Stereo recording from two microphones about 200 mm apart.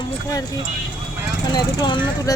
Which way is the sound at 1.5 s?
20° left (ahead or behind).